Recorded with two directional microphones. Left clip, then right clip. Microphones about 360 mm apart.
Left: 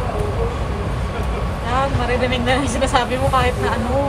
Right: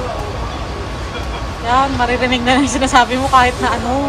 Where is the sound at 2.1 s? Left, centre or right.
Centre.